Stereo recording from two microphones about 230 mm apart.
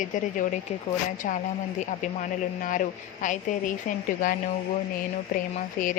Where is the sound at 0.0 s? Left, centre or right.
Left.